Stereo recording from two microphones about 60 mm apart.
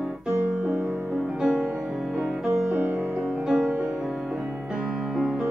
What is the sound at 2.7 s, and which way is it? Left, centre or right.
Music, right.